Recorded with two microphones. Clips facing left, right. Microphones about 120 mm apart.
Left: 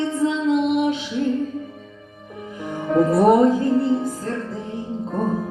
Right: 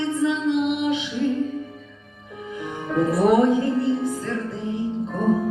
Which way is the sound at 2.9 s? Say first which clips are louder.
Left 3 dB; 40° left (ahead or behind).